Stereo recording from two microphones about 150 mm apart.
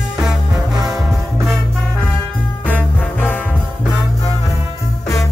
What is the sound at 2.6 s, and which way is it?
Music, 10° left (ahead or behind).